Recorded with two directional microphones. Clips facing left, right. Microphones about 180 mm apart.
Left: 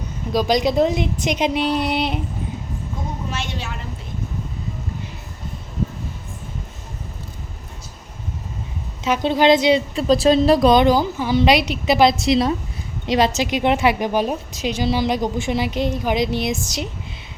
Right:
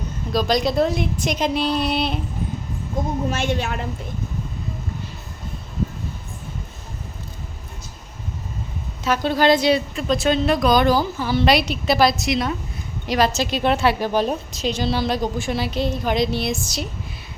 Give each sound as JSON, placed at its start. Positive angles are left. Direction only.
{"t": 0.3, "sound": "a woman's voice", "side_deg": 15}
{"t": 3.2, "sound": "a woman's voice", "side_deg": -50}
{"t": 9.0, "sound": "a woman's voice", "side_deg": 20}
{"t": 9.9, "sound": "a woman's voice", "side_deg": 35}